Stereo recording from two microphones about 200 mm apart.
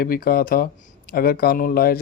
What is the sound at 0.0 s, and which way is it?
A man's voice, 45° left (ahead or behind).